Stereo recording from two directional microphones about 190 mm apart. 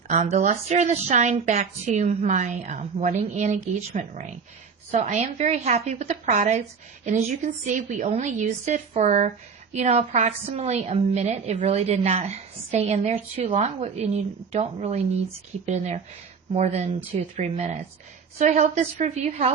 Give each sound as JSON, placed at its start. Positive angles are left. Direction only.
{"t": 0.1, "sound": "a woman's voice", "side_deg": -35}